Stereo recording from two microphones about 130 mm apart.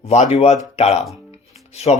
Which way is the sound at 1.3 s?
55° left (ahead or behind).